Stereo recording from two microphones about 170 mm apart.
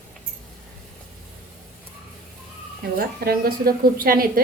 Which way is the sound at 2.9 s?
60° right (ahead or behind).